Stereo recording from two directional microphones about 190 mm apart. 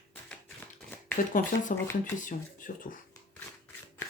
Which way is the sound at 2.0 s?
45° left (ahead or behind).